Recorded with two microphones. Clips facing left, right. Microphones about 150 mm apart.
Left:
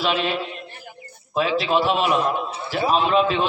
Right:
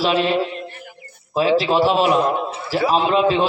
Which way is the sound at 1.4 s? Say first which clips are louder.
Right 4 dB; 35° right (ahead or behind).